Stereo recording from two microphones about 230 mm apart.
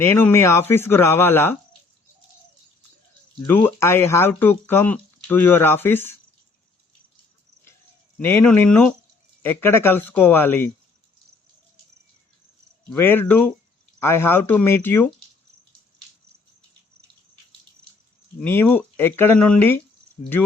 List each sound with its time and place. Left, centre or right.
0.0 s speech: centre
3.4 s speech: centre
8.2 s speech: centre
12.9 s speech: centre
18.4 s speech: centre